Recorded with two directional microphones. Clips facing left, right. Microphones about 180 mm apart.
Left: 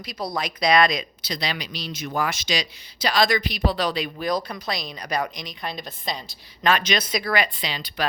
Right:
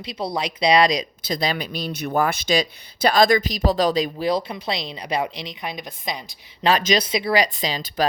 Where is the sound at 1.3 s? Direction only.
45° right (ahead or behind); by 6.3 s 15° right (ahead or behind).